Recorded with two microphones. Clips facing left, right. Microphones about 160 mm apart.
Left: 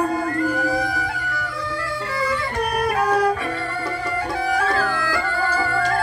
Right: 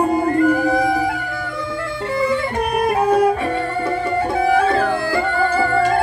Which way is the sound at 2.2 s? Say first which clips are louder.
Right 5 dB; 25° right (ahead or behind).